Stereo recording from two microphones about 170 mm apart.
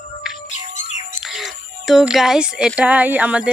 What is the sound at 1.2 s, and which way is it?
Speech, centre (ahead or behind).